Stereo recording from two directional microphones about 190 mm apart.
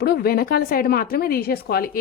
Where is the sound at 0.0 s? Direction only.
55° left (ahead or behind).